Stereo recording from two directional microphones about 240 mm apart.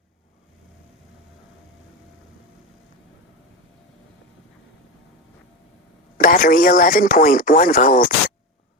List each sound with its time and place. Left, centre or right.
6.1 s speech: left